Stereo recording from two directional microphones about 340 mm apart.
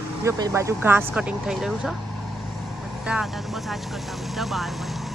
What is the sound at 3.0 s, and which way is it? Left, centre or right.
Speech, centre.